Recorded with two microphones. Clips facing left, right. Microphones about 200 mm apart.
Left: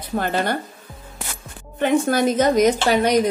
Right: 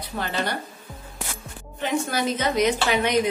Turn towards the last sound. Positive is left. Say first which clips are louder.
# left 4 dB
turn(degrees=40)  # may be behind; listen again after turning